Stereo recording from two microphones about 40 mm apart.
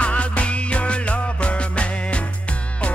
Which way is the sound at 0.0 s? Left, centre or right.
Left.